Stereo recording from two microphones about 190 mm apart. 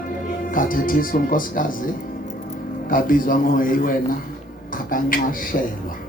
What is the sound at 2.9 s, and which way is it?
A man's voice, 45° left (ahead or behind).